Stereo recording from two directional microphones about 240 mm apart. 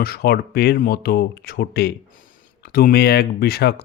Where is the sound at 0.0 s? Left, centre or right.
Left.